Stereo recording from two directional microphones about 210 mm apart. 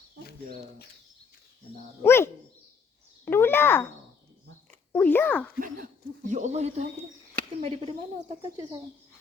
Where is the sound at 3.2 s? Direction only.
10° left (ahead or behind).